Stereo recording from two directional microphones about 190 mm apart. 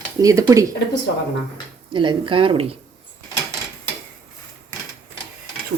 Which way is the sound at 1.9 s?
25° right (ahead or behind).